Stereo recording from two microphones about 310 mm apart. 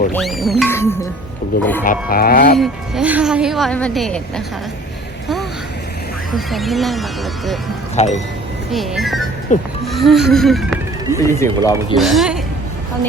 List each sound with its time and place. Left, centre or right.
0.1 s a woman's voice: centre
1.8 s speech: left
2.6 s a woman's voice: centre
6.3 s a woman's voice: centre
7.9 s speech: left
8.7 s a woman's voice: centre
9.5 s speech: left
9.8 s speech: centre
11.9 s a woman's voice: centre